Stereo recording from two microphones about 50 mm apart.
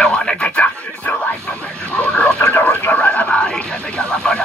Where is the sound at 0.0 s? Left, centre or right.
Centre.